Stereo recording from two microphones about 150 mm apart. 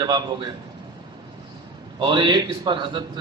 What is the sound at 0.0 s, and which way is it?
Speech, 30° right (ahead or behind).